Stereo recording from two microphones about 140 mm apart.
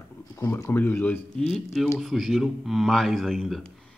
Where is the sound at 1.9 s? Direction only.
Centre (ahead or behind).